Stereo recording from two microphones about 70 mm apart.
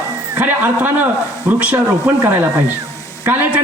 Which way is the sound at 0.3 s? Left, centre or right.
Right.